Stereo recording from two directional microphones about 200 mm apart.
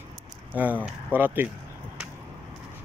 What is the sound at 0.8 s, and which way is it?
Speech, 10° right (ahead or behind).